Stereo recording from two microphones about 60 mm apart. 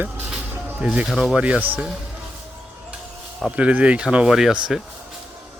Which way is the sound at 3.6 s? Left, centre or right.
Centre.